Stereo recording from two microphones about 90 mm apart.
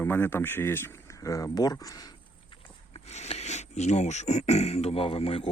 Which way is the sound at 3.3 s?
90° left.